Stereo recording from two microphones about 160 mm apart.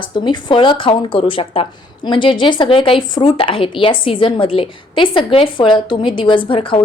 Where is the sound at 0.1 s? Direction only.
30° left (ahead or behind).